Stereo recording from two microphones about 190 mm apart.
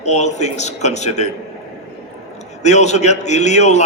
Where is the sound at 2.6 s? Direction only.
35° left (ahead or behind).